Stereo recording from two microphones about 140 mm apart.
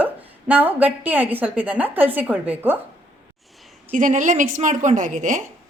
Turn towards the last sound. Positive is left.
turn(degrees=-65)  # may be behind; listen again after turning